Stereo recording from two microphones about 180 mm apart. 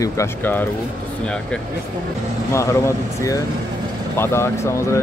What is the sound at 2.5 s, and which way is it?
Speech, 15° left (ahead or behind).